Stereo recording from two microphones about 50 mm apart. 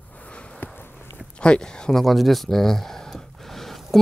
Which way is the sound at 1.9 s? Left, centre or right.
Centre.